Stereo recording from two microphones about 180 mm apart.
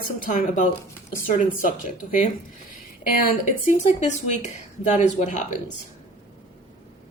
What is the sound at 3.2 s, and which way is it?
Speech, 50° left (ahead or behind).